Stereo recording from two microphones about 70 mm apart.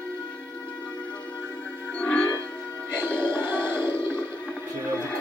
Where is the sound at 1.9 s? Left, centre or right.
Centre.